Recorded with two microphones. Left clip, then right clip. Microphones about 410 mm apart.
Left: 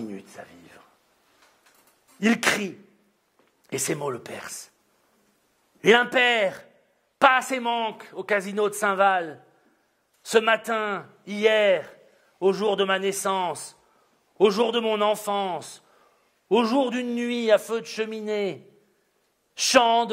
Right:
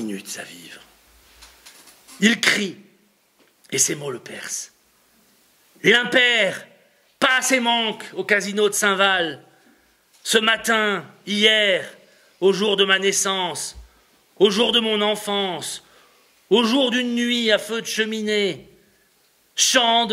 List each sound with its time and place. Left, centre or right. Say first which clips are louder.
2.1 s a man's voice: right 5 dB; left
3.6 s a man's voice: right 4 dB; left
5.8 s a man's voice: right 2 dB; left
8.7 s a man's voice: right 1 dB; left